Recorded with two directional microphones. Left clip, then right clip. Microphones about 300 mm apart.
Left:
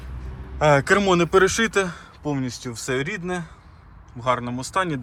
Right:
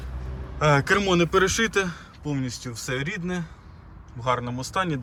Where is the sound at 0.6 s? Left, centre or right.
Centre.